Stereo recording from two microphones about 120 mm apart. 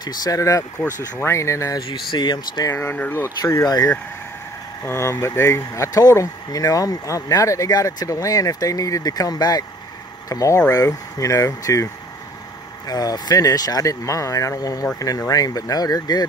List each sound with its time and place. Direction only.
0.0 s speech: 35° left (ahead or behind)
1.9 s speech: 45° left (ahead or behind)
2.7 s speech: 20° left (ahead or behind)
3.4 s speech: 30° left (ahead or behind)